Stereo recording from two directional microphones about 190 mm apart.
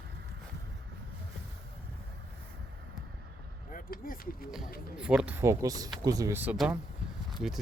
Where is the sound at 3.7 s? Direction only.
50° left (ahead or behind).